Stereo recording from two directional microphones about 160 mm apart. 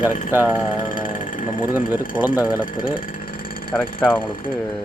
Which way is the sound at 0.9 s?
60° left (ahead or behind).